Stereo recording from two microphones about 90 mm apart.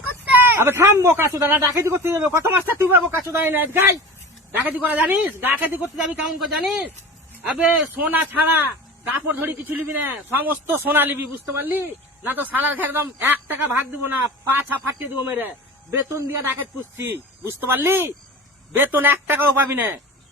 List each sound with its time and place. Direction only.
0.3 s speech: 20° right (ahead or behind)
6.0 s a man's voice: 5° right (ahead or behind); by 20.0 s 20° right (ahead or behind)